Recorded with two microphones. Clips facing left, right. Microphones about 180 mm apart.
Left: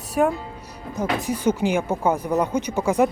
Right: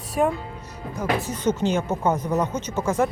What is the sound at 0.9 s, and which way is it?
Speech, 20° left (ahead or behind).